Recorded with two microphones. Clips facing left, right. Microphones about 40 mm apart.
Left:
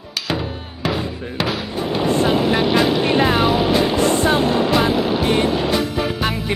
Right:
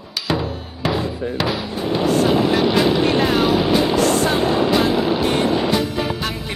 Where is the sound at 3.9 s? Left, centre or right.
Left.